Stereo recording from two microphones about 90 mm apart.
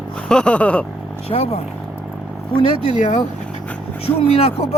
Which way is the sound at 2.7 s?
65° right (ahead or behind).